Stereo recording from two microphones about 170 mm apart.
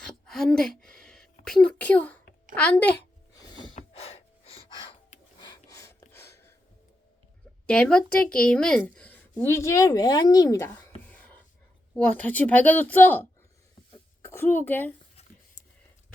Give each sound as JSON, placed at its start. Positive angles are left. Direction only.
{"t": 0.0, "sound": "a sound", "side_deg": 5}
{"t": 2.6, "sound": "a woman's voice", "side_deg": 10}
{"t": 3.8, "sound": "gasp", "side_deg": 35}
{"t": 7.7, "sound": "a woman's voice", "side_deg": 5}
{"t": 11.9, "sound": "a woman's voice", "side_deg": 10}